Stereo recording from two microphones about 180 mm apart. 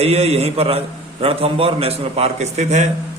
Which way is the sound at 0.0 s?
35° right (ahead or behind).